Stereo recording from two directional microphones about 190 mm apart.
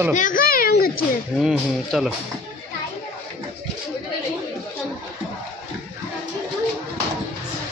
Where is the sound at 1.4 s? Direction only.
Centre (ahead or behind).